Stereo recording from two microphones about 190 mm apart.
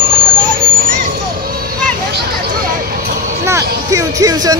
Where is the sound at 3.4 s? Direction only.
15° right (ahead or behind).